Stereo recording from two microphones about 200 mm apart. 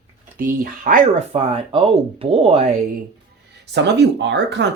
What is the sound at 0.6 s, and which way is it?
Speech, 45° right (ahead or behind).